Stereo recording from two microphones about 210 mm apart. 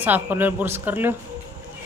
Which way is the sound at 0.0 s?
10° right (ahead or behind).